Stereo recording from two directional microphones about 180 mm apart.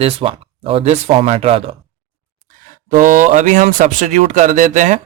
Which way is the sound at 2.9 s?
45° right (ahead or behind).